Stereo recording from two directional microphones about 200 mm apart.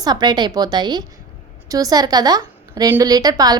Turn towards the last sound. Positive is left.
turn(degrees=-20)  # may be behind; listen again after turning